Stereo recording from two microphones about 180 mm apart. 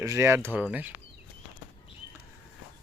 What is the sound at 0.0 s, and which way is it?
Speech, 15° right (ahead or behind).